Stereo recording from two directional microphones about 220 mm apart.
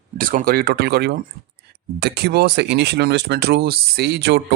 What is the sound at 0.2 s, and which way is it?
Speech, 40° right (ahead or behind).